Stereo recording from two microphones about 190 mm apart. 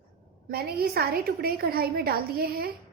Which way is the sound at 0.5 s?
55° right (ahead or behind).